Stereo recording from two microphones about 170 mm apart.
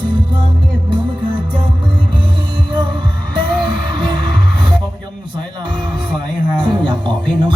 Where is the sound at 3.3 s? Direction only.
30° right (ahead or behind).